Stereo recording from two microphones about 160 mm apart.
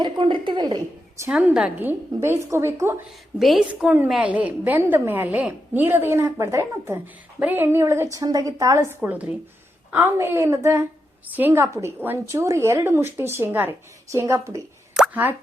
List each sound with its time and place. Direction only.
0.0 s a woman's voice: 30° right (ahead or behind)
1.3 s a woman's voice: 5° right (ahead or behind)
3.3 s a woman's voice: centre (ahead or behind); by 14.6 s 20° right (ahead or behind)
14.9 s plop: 5° right (ahead or behind)